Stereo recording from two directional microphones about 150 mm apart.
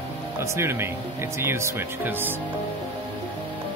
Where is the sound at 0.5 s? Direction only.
15° right (ahead or behind).